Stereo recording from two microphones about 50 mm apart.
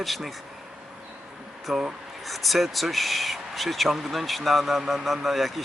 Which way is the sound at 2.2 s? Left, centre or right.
Centre.